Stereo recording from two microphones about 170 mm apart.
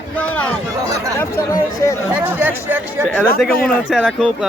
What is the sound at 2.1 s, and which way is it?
Speech, 10° right (ahead or behind).